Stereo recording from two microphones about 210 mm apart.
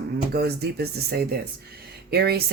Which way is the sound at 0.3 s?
50° right (ahead or behind).